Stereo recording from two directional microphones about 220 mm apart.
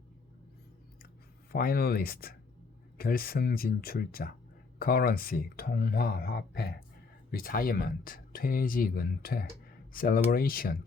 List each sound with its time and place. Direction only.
1.5 s speech: 45° left (ahead or behind)